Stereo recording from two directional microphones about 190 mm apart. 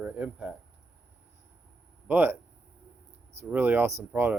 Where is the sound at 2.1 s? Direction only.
10° right (ahead or behind).